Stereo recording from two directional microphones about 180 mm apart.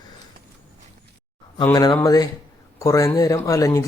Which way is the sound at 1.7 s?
20° left (ahead or behind).